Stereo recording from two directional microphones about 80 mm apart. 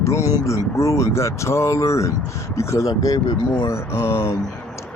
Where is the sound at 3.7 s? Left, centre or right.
Left.